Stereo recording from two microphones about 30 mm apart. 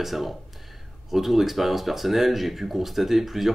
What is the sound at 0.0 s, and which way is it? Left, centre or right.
Speech, centre.